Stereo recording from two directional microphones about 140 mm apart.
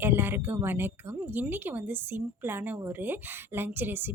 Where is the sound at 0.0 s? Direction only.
15° right (ahead or behind).